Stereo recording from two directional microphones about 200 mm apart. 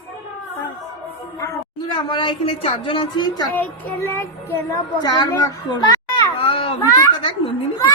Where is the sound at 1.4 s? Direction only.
20° left (ahead or behind).